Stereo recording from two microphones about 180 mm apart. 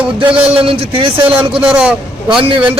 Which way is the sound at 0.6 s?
30° right (ahead or behind).